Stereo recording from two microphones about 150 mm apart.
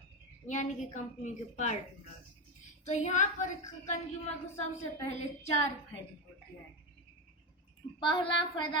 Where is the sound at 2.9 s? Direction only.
50° left (ahead or behind).